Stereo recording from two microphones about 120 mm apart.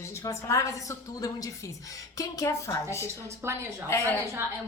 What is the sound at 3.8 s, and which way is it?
Speech, 20° left (ahead or behind).